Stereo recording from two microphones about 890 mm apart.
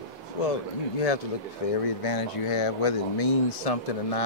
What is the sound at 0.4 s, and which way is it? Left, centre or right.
Speech, left.